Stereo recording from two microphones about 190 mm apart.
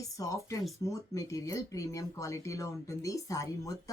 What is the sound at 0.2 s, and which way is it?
A woman's voice, 15° left (ahead or behind).